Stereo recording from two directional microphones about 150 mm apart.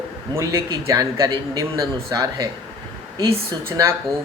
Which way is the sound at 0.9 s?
20° right (ahead or behind).